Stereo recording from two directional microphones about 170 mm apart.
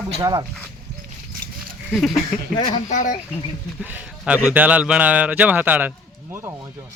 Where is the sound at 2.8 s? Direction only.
45° left (ahead or behind).